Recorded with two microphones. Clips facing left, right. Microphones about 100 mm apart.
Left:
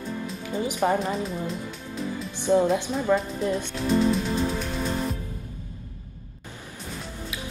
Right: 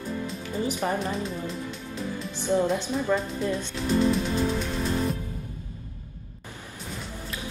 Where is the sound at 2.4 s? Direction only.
15° left (ahead or behind).